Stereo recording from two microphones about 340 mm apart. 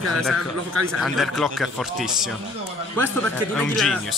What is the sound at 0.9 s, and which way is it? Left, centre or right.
A man's voice, centre.